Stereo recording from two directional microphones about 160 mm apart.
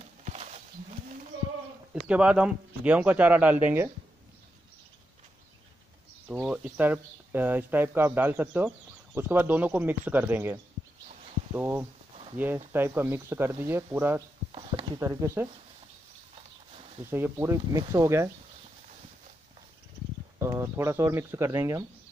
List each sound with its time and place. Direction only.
0.2 s wild animals: 45° right (ahead or behind)
2.0 s speech: 5° right (ahead or behind)
6.2 s speech: 10° right (ahead or behind)
17.0 s speech: 15° right (ahead or behind)
20.3 s speech: 15° right (ahead or behind)